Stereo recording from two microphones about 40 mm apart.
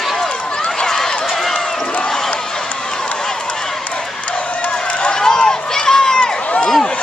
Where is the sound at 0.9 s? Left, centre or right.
Centre.